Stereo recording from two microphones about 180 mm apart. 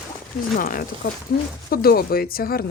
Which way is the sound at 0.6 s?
50° left (ahead or behind).